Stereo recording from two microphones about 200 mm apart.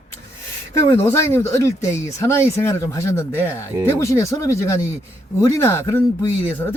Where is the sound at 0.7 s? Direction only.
15° left (ahead or behind).